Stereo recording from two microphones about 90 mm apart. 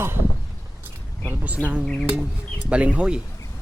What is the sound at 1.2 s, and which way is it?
Speech, 15° right (ahead or behind).